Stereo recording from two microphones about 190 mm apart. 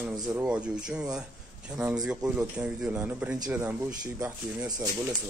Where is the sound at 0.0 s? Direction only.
10° right (ahead or behind).